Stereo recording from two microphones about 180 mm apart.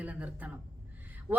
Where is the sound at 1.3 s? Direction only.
5° right (ahead or behind).